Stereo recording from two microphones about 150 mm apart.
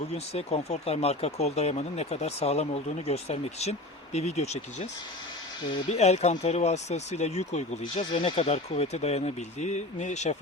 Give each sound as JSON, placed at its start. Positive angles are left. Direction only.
{"t": 0.1, "sound": "speech", "side_deg": 45}
{"t": 5.9, "sound": "speech", "side_deg": 45}